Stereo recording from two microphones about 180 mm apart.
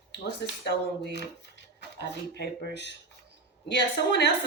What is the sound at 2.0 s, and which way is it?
Speech, 65° left (ahead or behind).